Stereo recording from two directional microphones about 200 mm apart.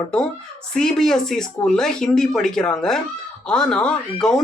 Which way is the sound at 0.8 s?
5° left (ahead or behind).